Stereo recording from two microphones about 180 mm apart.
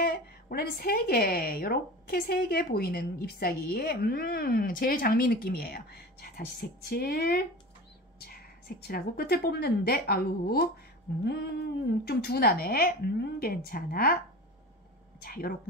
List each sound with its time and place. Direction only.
0.0 s a woman's voice: 55° left (ahead or behind)
15.2 s speech: 55° left (ahead or behind)